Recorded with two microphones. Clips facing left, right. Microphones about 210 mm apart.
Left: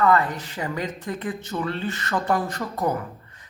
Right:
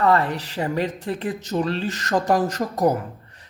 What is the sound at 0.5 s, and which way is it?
Speech, 35° right (ahead or behind).